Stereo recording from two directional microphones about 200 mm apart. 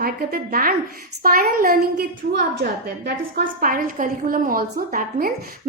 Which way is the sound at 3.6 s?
45° right (ahead or behind).